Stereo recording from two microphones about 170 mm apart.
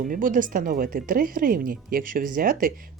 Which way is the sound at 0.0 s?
55° right (ahead or behind).